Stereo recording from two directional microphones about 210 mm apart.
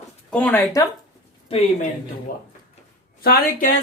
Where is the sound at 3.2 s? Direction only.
45° left (ahead or behind).